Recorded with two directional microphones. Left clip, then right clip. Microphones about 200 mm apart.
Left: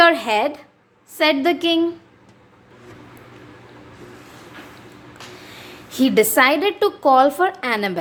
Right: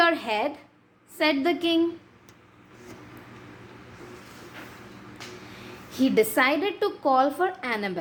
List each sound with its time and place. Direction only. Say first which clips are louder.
0.0 s a sound: left 8 dB; 25° left (ahead or behind)
1.2 s a woman's voice: left 6 dB; 20° left (ahead or behind)
5.5 s a woman's voice: left 6 dB; 25° left (ahead or behind)